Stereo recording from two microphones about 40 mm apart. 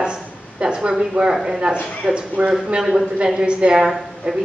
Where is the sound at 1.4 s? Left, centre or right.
Right.